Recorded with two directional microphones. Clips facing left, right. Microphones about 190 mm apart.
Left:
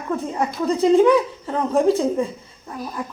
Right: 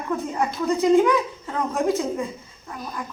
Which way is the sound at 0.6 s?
30° left (ahead or behind).